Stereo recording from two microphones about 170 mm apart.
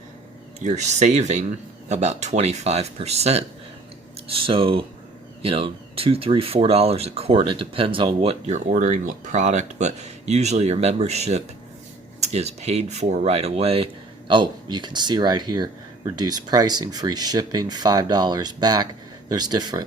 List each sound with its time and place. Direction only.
0.6 s speech: 45° right (ahead or behind); by 19.8 s 25° right (ahead or behind)